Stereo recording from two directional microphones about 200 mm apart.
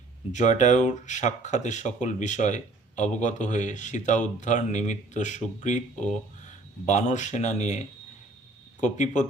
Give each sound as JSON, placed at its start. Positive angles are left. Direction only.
{"t": 0.3, "sound": "speech", "side_deg": 35}
{"t": 6.8, "sound": "speech", "side_deg": 35}
{"t": 8.8, "sound": "speech", "side_deg": 35}